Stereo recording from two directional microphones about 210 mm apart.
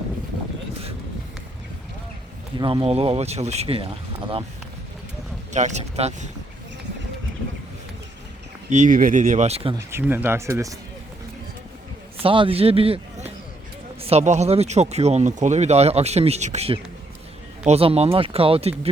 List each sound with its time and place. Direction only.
2.6 s speech: 20° right (ahead or behind)
5.5 s speech: 35° right (ahead or behind)
8.7 s speech: 40° right (ahead or behind)
9.7 s speech: 10° right (ahead or behind)
12.2 s a man's voice: 25° right (ahead or behind)